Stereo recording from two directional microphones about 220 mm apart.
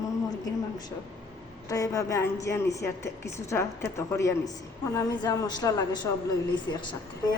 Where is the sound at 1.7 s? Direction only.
15° left (ahead or behind).